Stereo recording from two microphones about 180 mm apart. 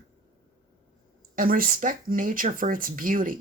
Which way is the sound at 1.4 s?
50° right (ahead or behind).